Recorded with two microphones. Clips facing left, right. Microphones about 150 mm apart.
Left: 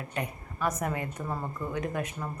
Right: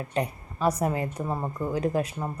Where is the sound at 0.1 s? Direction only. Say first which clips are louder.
Right 7 dB; 35° right (ahead or behind).